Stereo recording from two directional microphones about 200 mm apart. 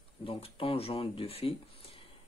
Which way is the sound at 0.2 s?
30° left (ahead or behind).